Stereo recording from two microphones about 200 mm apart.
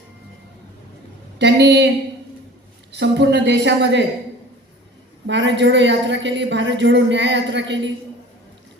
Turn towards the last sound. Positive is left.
turn(degrees=-60)  # may be behind; listen again after turning